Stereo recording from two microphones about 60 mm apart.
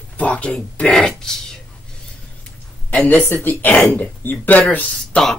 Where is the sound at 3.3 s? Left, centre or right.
Left.